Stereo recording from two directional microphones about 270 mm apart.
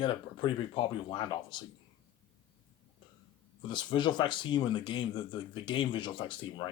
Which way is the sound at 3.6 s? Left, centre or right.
Centre.